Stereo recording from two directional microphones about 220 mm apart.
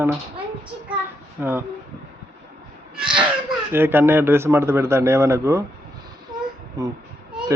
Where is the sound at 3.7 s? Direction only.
10° right (ahead or behind).